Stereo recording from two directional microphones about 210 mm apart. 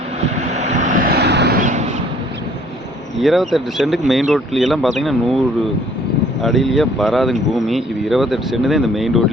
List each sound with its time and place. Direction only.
0.2 s vehicle: 35° right (ahead or behind); by 1.6 s 50° right (ahead or behind)
1.6 s a sound: 35° right (ahead or behind)
3.2 s speech: centre (ahead or behind)
6.4 s speech: centre (ahead or behind)